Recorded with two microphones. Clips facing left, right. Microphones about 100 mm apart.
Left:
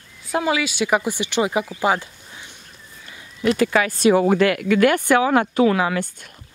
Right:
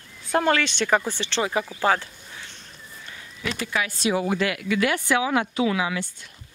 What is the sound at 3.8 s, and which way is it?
Speech, 50° left (ahead or behind).